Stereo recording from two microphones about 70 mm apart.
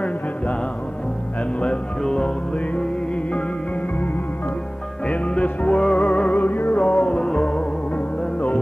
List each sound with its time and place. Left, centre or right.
1.6 s music: centre
5.0 s music: centre
6.3 s music: left
6.8 s music: centre